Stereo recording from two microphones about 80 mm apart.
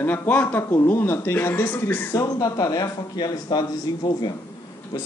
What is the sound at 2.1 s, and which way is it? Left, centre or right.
Speech, left.